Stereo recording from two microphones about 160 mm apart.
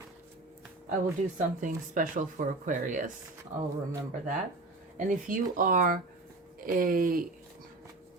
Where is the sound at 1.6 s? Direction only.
55° right (ahead or behind).